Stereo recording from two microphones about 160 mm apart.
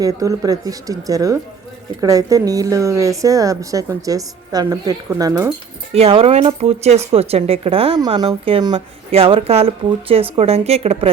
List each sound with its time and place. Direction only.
0.0 s speech: 20° right (ahead or behind)
5.9 s a woman's voice: 40° right (ahead or behind)